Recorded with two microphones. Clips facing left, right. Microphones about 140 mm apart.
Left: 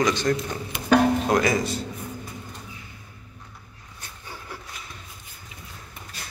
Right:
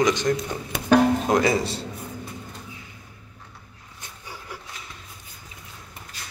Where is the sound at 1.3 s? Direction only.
25° right (ahead or behind).